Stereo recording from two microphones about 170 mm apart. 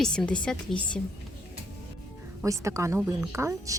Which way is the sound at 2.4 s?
20° right (ahead or behind).